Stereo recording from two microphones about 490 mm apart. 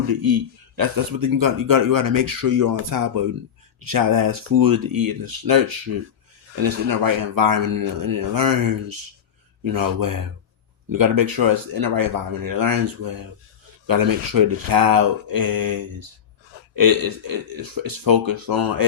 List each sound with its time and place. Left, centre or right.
0.1 s a man's voice: right